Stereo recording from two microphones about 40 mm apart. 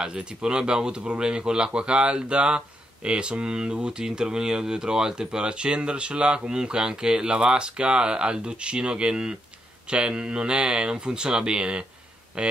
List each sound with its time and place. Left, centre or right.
0.0 s speech: right